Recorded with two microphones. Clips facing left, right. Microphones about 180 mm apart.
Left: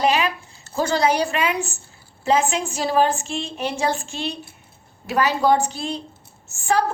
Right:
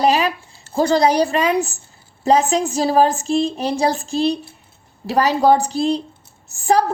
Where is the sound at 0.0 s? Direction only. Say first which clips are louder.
Right 3 dB; 35° right (ahead or behind).